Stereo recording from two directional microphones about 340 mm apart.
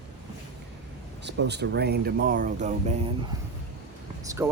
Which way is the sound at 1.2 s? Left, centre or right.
Right.